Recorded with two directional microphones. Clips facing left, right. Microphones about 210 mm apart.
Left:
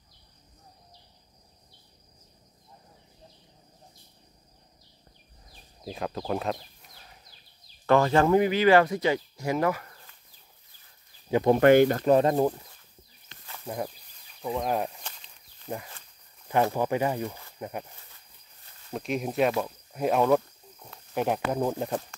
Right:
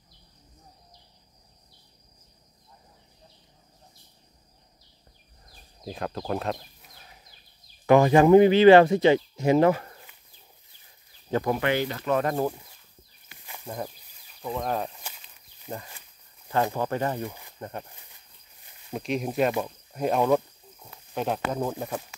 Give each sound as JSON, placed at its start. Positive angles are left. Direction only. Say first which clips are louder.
{"t": 5.8, "sound": "sheep", "louder": "even", "side_deg": 0}
{"t": 7.8, "sound": "speech", "louder": "right 4 dB", "side_deg": -15}
{"t": 8.4, "sound": "speech", "louder": "right 8 dB", "side_deg": -25}
{"t": 11.3, "sound": "speech", "louder": "left 2 dB", "side_deg": 10}
{"t": 11.6, "sound": "speech", "louder": "left 9 dB", "side_deg": 50}
{"t": 12.1, "sound": "speech", "louder": "even", "side_deg": 30}
{"t": 13.7, "sound": "a sound", "louder": "left 2 dB", "side_deg": 10}
{"t": 16.7, "sound": "speech", "louder": "left 1 dB", "side_deg": 10}
{"t": 18.6, "sound": "a sound", "louder": "right 1 dB", "side_deg": -15}
{"t": 19.0, "sound": "speech", "louder": "even", "side_deg": 0}
{"t": 21.1, "sound": "speech", "louder": "left 1 dB", "side_deg": 10}